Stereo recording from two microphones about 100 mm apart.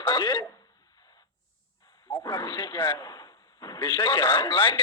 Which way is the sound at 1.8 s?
40° left (ahead or behind).